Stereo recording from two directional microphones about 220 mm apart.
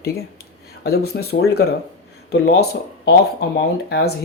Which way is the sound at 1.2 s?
45° left (ahead or behind).